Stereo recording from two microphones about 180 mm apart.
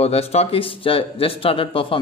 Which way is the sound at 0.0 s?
35° left (ahead or behind).